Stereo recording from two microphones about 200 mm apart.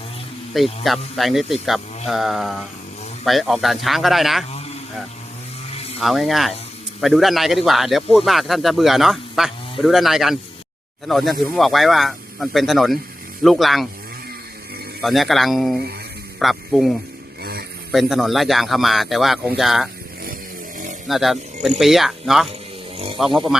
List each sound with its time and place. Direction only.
0.5 s speech: centre (ahead or behind)
6.0 s speech: centre (ahead or behind)
15.0 s speech: centre (ahead or behind)
17.4 s a sound: 50° right (ahead or behind)
17.9 s speech: centre (ahead or behind)
21.1 s speech: centre (ahead or behind)